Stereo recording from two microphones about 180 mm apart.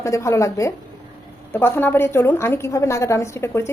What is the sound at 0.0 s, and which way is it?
A woman's voice, 15° left (ahead or behind).